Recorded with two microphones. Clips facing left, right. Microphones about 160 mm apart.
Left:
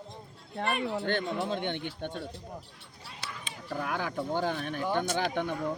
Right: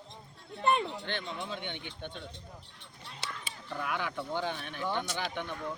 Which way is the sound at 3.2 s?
25° right (ahead or behind).